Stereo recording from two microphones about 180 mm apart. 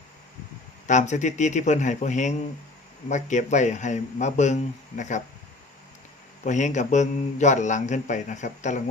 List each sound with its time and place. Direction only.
0.9 s a man's voice: 40° left (ahead or behind)
6.4 s a man's voice: 40° left (ahead or behind)